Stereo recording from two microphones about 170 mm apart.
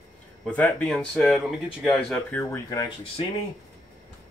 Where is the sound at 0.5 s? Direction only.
10° left (ahead or behind).